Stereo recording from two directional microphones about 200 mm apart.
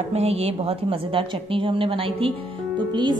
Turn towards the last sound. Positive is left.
turn(degrees=-20)  # may be behind; listen again after turning